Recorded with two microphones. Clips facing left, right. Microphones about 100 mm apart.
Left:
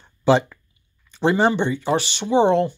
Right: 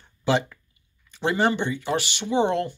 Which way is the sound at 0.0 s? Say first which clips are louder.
Left 6 dB; 25° left (ahead or behind).